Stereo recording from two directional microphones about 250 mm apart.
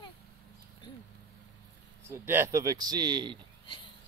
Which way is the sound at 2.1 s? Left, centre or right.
Centre.